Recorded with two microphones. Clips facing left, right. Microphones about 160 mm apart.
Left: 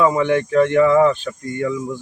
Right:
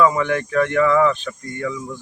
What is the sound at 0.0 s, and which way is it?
Speech, 25° left (ahead or behind).